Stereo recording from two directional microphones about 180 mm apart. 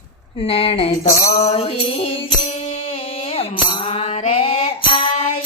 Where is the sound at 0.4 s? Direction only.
35° left (ahead or behind).